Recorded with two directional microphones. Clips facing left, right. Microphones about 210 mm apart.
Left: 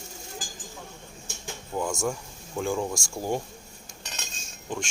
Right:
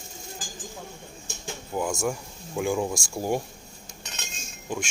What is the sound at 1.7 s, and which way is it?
Speech, 10° right (ahead or behind).